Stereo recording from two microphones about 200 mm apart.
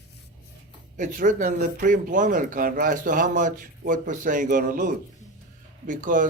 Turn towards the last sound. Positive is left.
turn(degrees=-40)  # may be behind; listen again after turning